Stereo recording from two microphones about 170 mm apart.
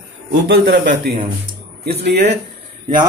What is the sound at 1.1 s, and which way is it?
Speech, 70° right (ahead or behind).